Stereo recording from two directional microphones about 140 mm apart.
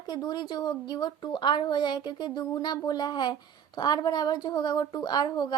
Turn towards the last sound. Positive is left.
turn(degrees=30)  # may be behind; listen again after turning